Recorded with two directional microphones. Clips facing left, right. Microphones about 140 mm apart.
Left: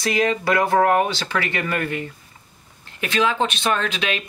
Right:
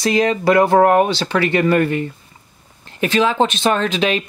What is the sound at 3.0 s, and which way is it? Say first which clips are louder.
Speech: right 5 dB; 30° right (ahead or behind).